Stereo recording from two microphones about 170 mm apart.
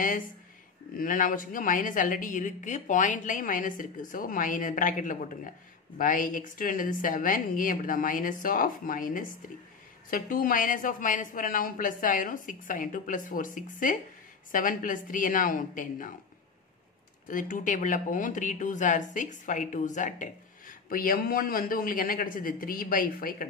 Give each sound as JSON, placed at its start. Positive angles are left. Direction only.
{"t": 0.9, "sound": "speech", "side_deg": 50}
{"t": 17.3, "sound": "speech", "side_deg": 50}